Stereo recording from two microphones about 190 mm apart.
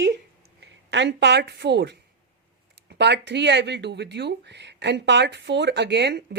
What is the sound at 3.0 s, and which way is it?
Speech, 65° right (ahead or behind).